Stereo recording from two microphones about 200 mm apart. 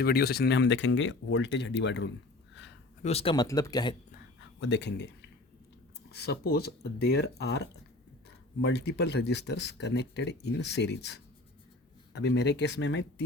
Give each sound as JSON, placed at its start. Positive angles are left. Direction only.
{"t": 0.0, "sound": "speech", "side_deg": 50}
{"t": 2.6, "sound": "a sound", "side_deg": 60}
{"t": 3.0, "sound": "speech", "side_deg": 30}
{"t": 3.4, "sound": "speech", "side_deg": 20}
{"t": 4.4, "sound": "speech", "side_deg": 65}